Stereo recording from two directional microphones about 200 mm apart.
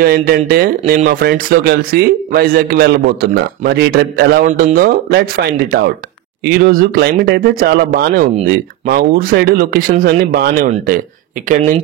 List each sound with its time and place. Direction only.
0.0 s speech: 50° right (ahead or behind)
11.4 s speech: 40° right (ahead or behind)